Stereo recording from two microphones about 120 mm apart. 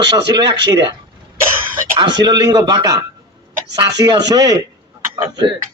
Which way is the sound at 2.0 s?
40° right (ahead or behind).